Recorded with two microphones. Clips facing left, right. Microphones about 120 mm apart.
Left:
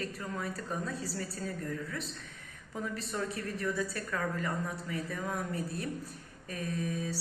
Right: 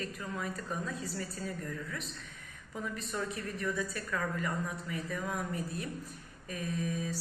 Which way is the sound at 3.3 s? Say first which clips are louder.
Left 1 dB; 35° left (ahead or behind).